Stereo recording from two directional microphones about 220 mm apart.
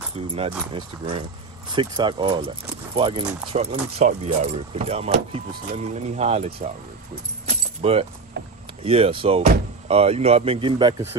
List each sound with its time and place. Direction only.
0.7 s speech: 20° right (ahead or behind)
7.4 s keys jangling: 25° right (ahead or behind)
8.8 s speech: 25° right (ahead or behind)